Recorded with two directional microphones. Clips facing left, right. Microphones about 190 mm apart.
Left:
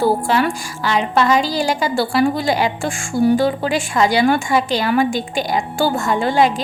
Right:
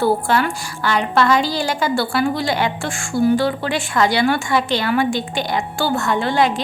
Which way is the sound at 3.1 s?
15° left (ahead or behind).